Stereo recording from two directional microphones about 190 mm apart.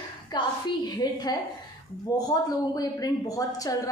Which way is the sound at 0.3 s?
20° left (ahead or behind).